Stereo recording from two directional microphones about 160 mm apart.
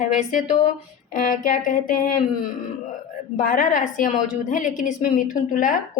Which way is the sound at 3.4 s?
55° left (ahead or behind).